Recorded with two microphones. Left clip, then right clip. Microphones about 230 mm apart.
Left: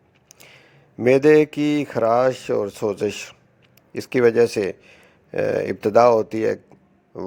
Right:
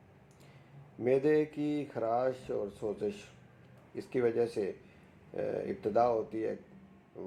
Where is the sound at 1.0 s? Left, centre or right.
Left.